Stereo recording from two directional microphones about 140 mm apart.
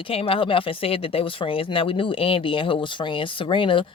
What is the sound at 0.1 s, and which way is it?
Speech, 40° left (ahead or behind).